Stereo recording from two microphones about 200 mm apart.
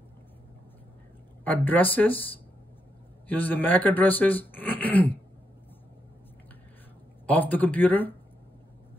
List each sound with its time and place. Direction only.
1.4 s speech: 10° left (ahead or behind)
3.3 s speech: 10° left (ahead or behind)
7.2 s speech: 10° left (ahead or behind)